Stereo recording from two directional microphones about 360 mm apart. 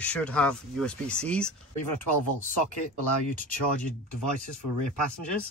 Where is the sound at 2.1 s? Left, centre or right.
Left.